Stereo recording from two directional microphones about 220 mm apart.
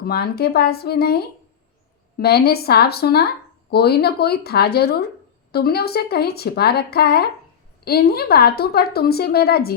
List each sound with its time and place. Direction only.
0.0 s a woman's voice: 45° left (ahead or behind)